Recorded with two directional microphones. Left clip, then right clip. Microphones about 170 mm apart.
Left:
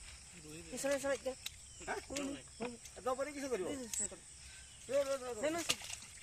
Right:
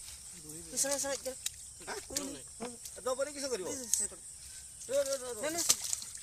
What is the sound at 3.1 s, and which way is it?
Speech, 10° right (ahead or behind).